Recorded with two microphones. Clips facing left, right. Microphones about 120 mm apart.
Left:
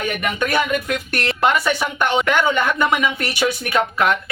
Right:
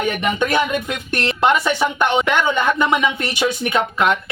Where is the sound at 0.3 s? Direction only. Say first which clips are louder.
Even; 20° right (ahead or behind).